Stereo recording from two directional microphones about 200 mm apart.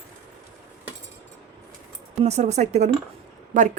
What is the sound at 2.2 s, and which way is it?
Speech, 35° right (ahead or behind).